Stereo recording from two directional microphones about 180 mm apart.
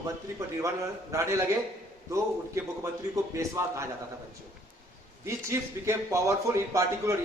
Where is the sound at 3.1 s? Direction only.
15° right (ahead or behind).